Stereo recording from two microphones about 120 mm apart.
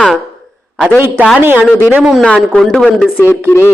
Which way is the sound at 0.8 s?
15° right (ahead or behind).